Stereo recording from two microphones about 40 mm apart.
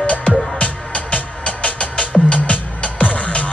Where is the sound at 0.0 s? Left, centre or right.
Left.